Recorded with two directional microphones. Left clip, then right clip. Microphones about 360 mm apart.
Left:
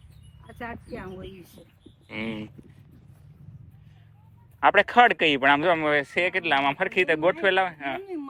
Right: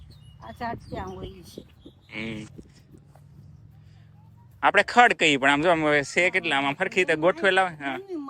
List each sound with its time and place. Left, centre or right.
0.6 s speech: centre
2.0 s speech: centre
4.6 s speech: centre